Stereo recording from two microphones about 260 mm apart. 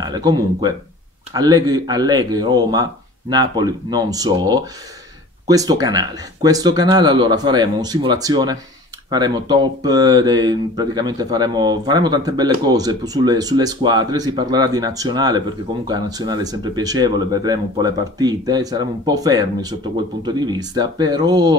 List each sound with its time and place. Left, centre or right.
0.0 s speech: centre